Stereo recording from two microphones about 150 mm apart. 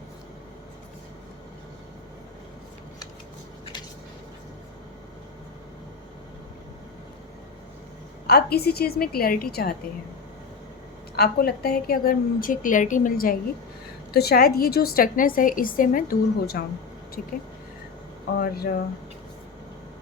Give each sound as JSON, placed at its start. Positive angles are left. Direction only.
{"t": 8.3, "sound": "a woman's voice", "side_deg": 90}
{"t": 11.2, "sound": "a woman's voice", "side_deg": 90}
{"t": 14.1, "sound": "a woman's voice", "side_deg": 90}
{"t": 17.2, "sound": "speech", "side_deg": 65}
{"t": 18.3, "sound": "a woman's voice", "side_deg": 75}